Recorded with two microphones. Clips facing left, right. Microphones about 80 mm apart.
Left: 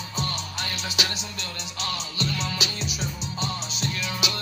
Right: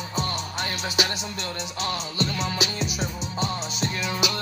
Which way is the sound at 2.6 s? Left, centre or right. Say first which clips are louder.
Right 4 dB; right.